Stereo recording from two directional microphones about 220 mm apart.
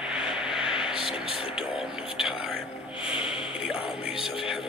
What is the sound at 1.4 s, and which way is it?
Speech, 25° left (ahead or behind).